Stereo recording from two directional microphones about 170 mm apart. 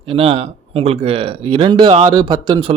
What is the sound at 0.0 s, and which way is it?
Speech, 35° right (ahead or behind).